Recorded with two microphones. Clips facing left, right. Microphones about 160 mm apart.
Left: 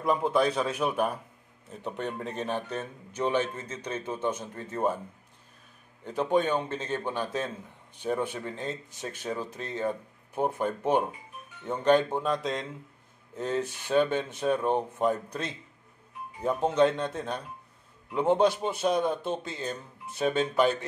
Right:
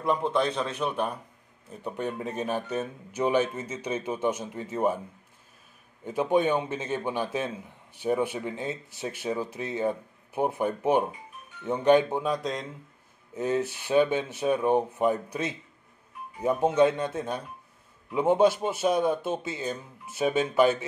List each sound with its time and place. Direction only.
0.0 s a man's voice: 5° left (ahead or behind)
6.0 s a man's voice: 10° right (ahead or behind)